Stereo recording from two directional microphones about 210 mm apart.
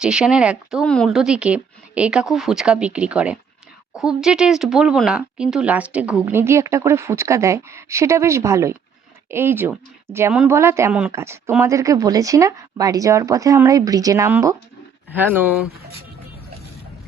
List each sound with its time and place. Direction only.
0.0 s speech: 5° right (ahead or behind)
15.7 s speech: 45° right (ahead or behind)